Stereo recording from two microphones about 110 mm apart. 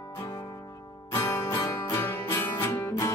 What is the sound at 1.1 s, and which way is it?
Music, 30° left (ahead or behind).